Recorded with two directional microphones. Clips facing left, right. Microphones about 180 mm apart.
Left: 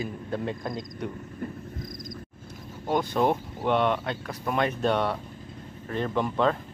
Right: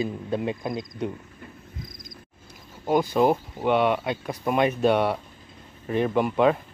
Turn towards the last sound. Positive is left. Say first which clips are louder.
# right 4 dB
turn(degrees=-10)  # may be behind; listen again after turning